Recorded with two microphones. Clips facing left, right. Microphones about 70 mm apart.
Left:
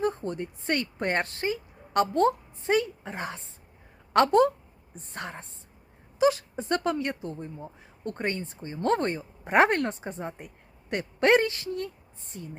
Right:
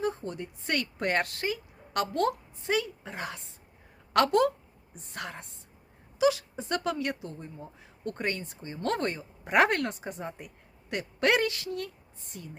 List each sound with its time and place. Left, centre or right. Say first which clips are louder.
0.0 s a woman's voice: left 3 dB; left